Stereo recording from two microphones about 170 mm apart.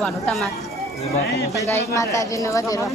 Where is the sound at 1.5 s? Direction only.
15° left (ahead or behind).